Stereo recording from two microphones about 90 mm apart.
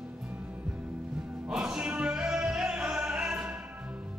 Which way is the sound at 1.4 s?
10° right (ahead or behind).